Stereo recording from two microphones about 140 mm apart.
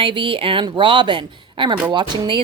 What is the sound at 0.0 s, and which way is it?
A woman's voice, 40° right (ahead or behind).